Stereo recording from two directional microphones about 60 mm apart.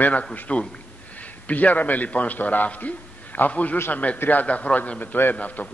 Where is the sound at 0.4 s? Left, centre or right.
Left.